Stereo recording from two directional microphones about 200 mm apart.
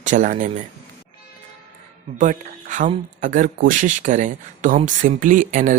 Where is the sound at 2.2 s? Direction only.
40° right (ahead or behind).